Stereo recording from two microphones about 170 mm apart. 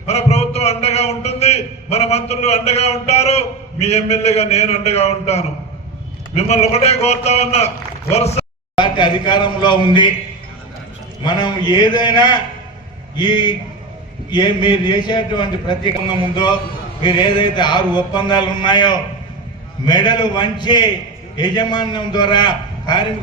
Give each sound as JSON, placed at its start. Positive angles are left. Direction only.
{"t": 0.1, "sound": "a man's voice", "side_deg": 40}
{"t": 8.7, "sound": "a man's voice", "side_deg": 25}
{"t": 11.2, "sound": "a man's voice", "side_deg": 25}